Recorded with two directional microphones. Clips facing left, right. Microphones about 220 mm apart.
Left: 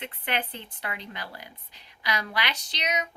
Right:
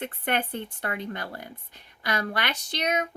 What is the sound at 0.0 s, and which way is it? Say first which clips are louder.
Speech: right 4 dB; 50° right (ahead or behind).